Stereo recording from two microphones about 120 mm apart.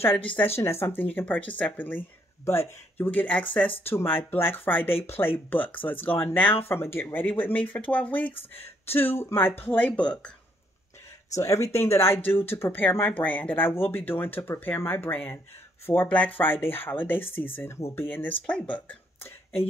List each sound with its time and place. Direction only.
0.6 s speech: 20° left (ahead or behind)
11.3 s speech: 25° left (ahead or behind)